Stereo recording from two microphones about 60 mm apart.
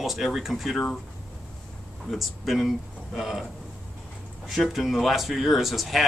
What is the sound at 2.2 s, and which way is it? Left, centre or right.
Speech, centre.